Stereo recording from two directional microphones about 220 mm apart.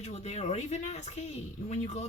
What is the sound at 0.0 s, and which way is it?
Speech, 30° left (ahead or behind).